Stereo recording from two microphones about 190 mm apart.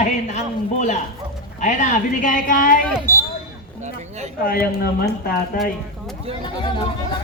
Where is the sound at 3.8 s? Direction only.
35° right (ahead or behind).